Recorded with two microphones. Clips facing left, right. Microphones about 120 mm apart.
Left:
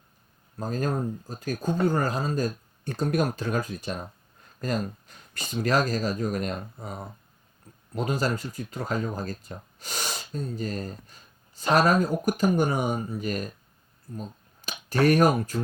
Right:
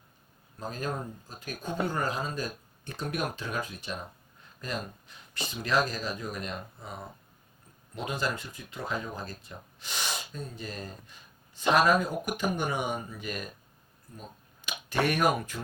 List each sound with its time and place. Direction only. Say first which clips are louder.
0.6 s speech: left 6 dB; 40° left (ahead or behind)